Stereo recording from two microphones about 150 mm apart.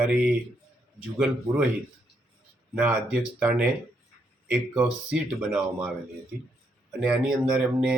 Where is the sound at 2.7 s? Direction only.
10° right (ahead or behind).